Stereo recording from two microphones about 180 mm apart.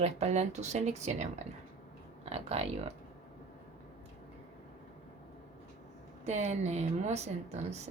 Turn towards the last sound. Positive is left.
turn(degrees=-40)  # may be behind; listen again after turning